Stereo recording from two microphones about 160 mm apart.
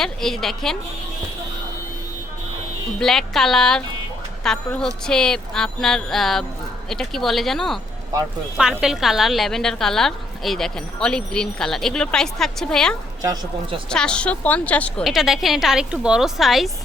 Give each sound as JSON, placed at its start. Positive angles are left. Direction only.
{"t": 0.0, "sound": "a woman's voice", "side_deg": 0}
{"t": 3.0, "sound": "a woman's voice", "side_deg": 0}
{"t": 8.8, "sound": "a woman's voice", "side_deg": 0}
{"t": 13.2, "sound": "speech", "side_deg": -30}
{"t": 13.9, "sound": "a woman's voice", "side_deg": 5}